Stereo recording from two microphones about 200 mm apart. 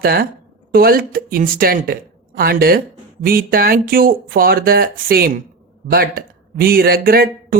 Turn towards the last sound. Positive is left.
turn(degrees=-45)  # may be behind; listen again after turning